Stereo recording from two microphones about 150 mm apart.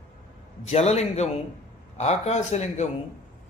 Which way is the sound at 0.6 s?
45° left (ahead or behind).